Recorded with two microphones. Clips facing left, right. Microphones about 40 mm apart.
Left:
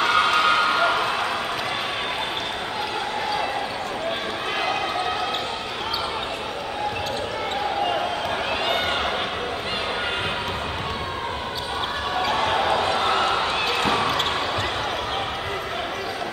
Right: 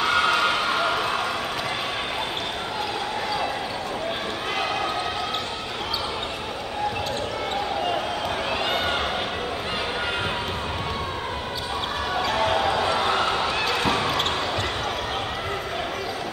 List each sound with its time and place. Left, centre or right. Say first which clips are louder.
0.0 s a sound: left 2 dB; centre
8.6 s run: left 2 dB; centre
12.2 s basketball bounce: left 1 dB; centre
12.6 s basketball bounce: left 1 dB; left
12.9 s basketball bounce: left 1 dB; centre